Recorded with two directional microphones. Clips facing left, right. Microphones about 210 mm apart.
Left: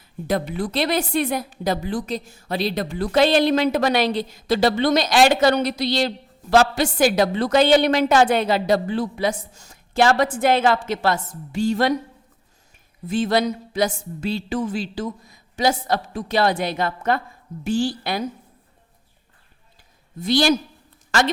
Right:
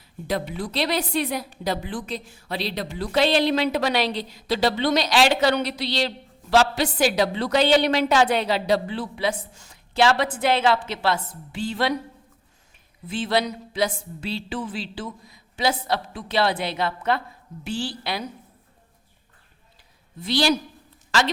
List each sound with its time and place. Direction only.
0.5 s a woman's voice: 50° left (ahead or behind)
13.1 s a woman's voice: 45° left (ahead or behind)
20.1 s a woman's voice: 45° left (ahead or behind)